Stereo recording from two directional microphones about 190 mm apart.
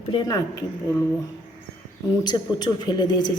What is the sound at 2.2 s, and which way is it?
A woman's voice, 20° left (ahead or behind).